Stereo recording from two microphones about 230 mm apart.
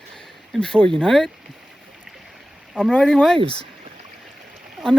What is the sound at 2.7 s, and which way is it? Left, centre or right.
Speech, centre.